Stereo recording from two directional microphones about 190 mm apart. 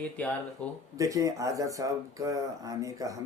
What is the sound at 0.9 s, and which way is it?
Speech, 15° right (ahead or behind).